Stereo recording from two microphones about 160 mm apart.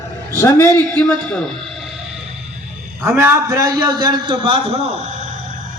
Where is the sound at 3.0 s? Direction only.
15° right (ahead or behind); by 5.3 s 45° right (ahead or behind).